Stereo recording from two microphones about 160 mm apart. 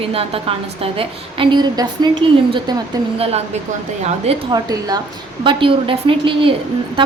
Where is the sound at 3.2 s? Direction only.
40° right (ahead or behind).